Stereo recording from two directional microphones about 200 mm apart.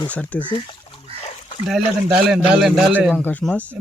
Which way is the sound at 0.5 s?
25° left (ahead or behind).